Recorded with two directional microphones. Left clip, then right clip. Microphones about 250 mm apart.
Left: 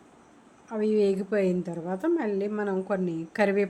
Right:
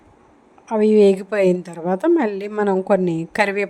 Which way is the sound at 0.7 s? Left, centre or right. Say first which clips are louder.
Right 11 dB; right.